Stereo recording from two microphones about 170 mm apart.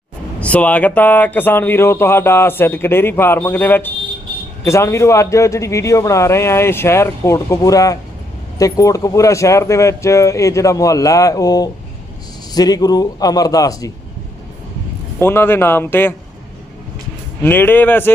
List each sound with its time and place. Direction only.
0.3 s speech: 10° left (ahead or behind)
15.2 s speech: 15° left (ahead or behind)
17.4 s speech: 10° left (ahead or behind)